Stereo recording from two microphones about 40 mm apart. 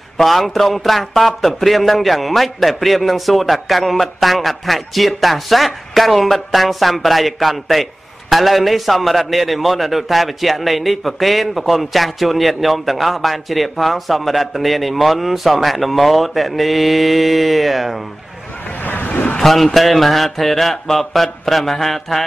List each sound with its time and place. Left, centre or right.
0.2 s speech: centre
18.9 s vehicle: left
19.4 s speech: centre